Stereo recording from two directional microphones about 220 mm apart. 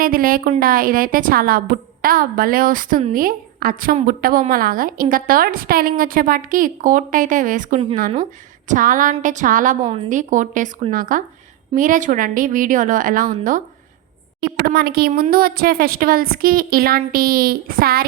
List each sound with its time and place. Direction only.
0.0 s a woman's voice: 40° right (ahead or behind)